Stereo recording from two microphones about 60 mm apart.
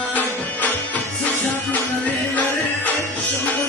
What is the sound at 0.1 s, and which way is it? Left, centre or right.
Music, left.